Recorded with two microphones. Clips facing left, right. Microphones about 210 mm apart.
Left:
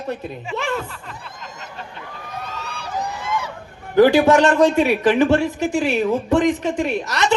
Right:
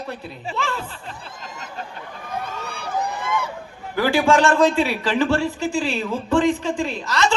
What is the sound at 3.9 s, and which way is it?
A man's voice, 20° left (ahead or behind).